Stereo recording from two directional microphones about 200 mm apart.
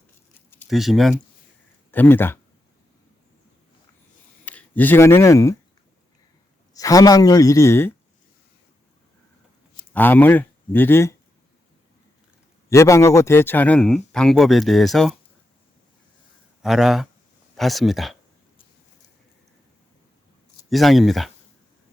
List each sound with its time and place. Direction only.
0.7 s speech: centre (ahead or behind)
4.4 s speech: 10° left (ahead or behind)
6.7 s speech: 15° left (ahead or behind)
9.9 s speech: 10° left (ahead or behind)
12.7 s speech: 15° left (ahead or behind)
16.6 s speech: centre (ahead or behind)
20.7 s speech: centre (ahead or behind)